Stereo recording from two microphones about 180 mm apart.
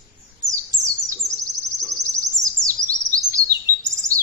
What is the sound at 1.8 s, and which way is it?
Chirp, 20° right (ahead or behind).